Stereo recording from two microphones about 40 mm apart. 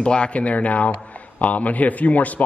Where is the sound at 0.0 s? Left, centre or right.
Left.